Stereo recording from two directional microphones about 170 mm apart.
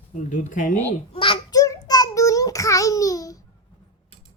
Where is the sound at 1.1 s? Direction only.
30° left (ahead or behind).